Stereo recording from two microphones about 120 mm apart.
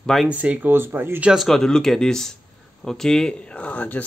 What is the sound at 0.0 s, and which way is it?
Speech, centre (ahead or behind).